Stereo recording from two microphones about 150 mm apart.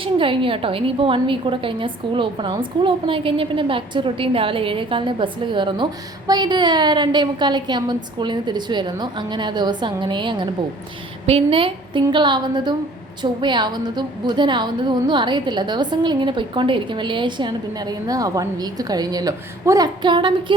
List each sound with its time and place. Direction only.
0.0 s a woman's voice: 35° right (ahead or behind)